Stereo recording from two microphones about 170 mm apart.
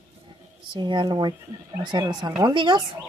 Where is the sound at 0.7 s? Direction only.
25° right (ahead or behind).